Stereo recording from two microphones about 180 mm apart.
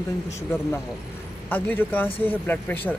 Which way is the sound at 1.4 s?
10° left (ahead or behind).